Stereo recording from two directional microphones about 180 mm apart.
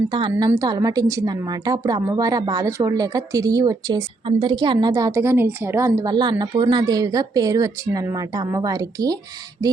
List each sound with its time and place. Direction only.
0.1 s a woman's voice: 25° right (ahead or behind)